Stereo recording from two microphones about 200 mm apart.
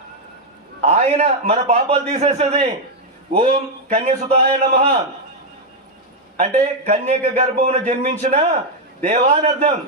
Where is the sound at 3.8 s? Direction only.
35° right (ahead or behind).